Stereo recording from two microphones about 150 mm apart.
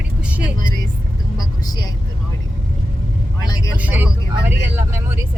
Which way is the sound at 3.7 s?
10° right (ahead or behind).